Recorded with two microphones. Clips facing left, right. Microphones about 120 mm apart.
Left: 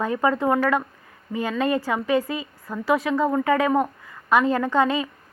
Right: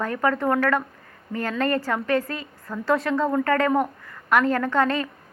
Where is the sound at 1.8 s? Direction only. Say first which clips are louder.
Left 1 dB; 15° left (ahead or behind).